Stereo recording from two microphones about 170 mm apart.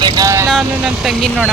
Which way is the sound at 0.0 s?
20° right (ahead or behind).